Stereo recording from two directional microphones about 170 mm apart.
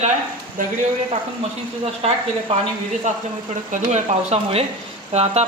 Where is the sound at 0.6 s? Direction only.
55° right (ahead or behind).